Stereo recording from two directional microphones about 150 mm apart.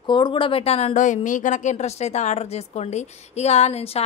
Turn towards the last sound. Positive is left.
turn(degrees=45)  # may be behind; listen again after turning